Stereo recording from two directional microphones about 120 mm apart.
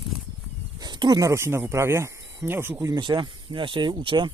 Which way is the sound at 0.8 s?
35° right (ahead or behind).